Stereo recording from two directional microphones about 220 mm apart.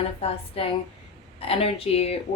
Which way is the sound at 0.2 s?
25° left (ahead or behind).